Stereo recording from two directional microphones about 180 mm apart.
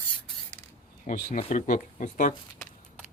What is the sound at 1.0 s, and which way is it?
Speech, 40° left (ahead or behind).